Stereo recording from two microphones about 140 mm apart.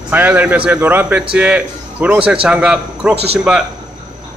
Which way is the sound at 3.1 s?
45° right (ahead or behind).